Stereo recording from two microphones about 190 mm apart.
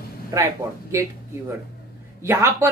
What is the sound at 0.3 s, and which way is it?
Speech, 15° right (ahead or behind).